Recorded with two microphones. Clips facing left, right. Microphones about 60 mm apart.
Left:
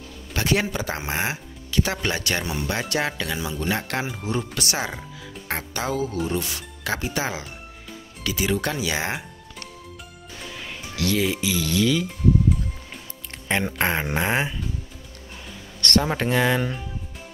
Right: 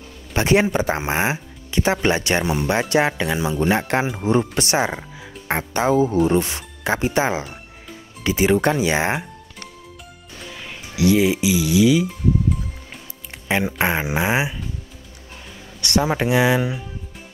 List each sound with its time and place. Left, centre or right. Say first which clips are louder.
0.3 s speech: right 6 dB; right
10.5 s music: right 1 dB; centre
11.0 s speech: right 7 dB; centre
15.8 s speech: right 2 dB; centre